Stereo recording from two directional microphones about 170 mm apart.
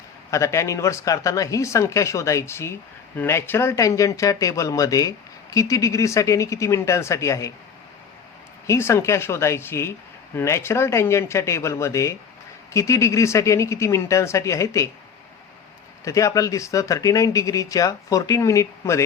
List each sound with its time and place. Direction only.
0.3 s speech: 15° left (ahead or behind)
8.6 s speech: 15° left (ahead or behind)
16.0 s speech: 20° left (ahead or behind)